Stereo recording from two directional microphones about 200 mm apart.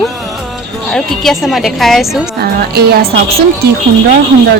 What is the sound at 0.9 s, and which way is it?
A woman's voice, centre (ahead or behind).